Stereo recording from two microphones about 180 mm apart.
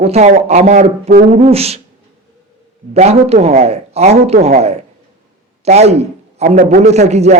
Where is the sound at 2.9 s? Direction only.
35° right (ahead or behind).